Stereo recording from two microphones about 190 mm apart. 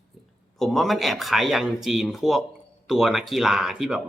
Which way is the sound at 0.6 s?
Centre (ahead or behind).